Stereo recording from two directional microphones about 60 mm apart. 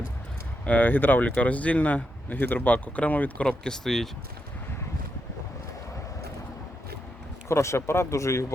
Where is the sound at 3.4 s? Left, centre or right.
Centre.